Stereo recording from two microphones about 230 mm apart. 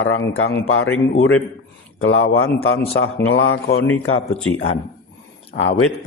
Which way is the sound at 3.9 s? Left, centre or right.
Left.